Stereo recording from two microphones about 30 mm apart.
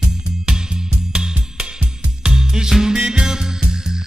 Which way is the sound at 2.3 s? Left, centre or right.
Right.